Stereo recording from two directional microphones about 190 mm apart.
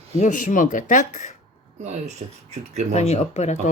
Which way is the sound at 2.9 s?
35° left (ahead or behind).